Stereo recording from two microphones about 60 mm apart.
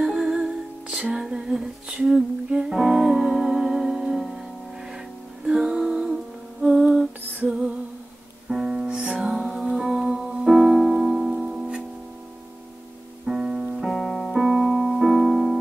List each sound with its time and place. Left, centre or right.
0.0 s music: centre
5.4 s music: centre
6.6 s lullaby: centre
7.4 s music: centre
8.5 s music: centre
13.3 s music: centre
13.7 s piano: centre